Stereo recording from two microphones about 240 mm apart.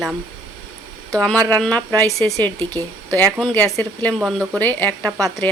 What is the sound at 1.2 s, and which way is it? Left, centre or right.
Speech, centre.